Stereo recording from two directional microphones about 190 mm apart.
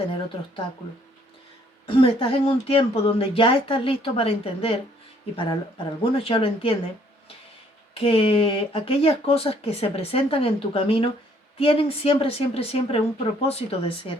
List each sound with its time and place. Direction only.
1.9 s speech: 30° left (ahead or behind)
7.9 s speech: 30° left (ahead or behind)